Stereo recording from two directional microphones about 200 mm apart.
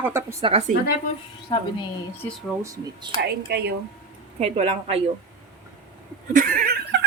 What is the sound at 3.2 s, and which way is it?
Speech, 55° right (ahead or behind).